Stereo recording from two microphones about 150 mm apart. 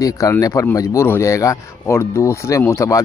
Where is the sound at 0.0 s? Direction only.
25° left (ahead or behind).